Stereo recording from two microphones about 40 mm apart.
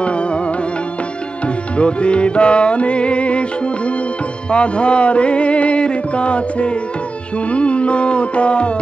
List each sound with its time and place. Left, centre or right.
0.0 s music: left
1.8 s music: left